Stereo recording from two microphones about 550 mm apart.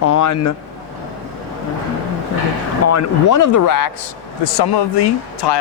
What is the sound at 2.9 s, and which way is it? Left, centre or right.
Speech, left.